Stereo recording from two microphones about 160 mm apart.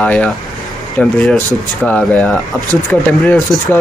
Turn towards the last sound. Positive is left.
turn(degrees=5)  # may be behind; listen again after turning